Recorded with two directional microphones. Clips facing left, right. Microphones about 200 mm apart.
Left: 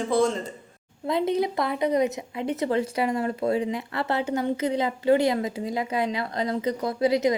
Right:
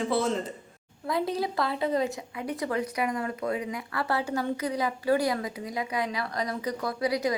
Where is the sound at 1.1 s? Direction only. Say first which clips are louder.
Left 5 dB; 20° left (ahead or behind).